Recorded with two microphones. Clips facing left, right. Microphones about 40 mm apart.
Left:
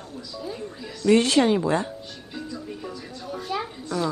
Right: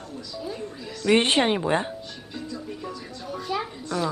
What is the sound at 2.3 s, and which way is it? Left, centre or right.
Speech, centre.